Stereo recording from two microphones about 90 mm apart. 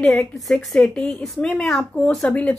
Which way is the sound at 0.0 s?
5° left (ahead or behind).